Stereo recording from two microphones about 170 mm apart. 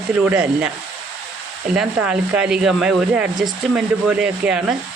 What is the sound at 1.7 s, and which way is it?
Speech, 5° right (ahead or behind).